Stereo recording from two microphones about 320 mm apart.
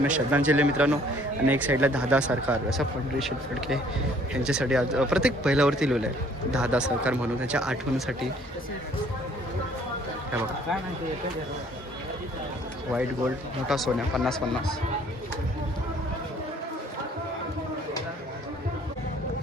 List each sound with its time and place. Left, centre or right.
0.0 s speech: centre
12.9 s speech: centre